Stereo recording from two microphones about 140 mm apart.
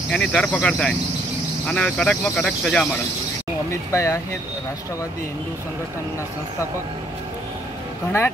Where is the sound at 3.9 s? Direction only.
20° left (ahead or behind).